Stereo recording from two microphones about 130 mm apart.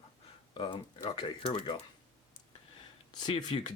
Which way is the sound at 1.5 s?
35° left (ahead or behind).